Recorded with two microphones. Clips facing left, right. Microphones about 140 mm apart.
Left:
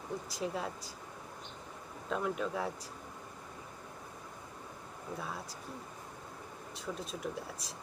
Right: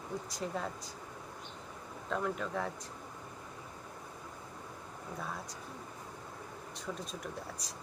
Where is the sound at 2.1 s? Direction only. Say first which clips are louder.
Left 1 dB; 5° left (ahead or behind).